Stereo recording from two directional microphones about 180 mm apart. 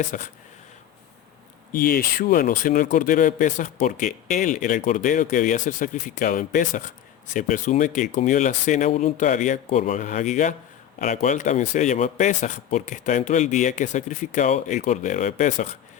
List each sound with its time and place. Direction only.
0.0 s a man's voice: 45° left (ahead or behind)
1.7 s a man's voice: 50° left (ahead or behind)